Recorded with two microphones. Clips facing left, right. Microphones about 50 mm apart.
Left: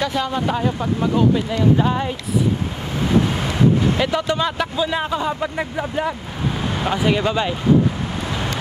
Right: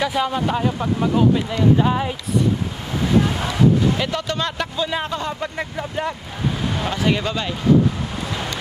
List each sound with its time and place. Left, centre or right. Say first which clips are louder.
0.0 s speech: even; centre
4.0 s speech: left 4 dB; centre
6.8 s speech: left 3 dB; centre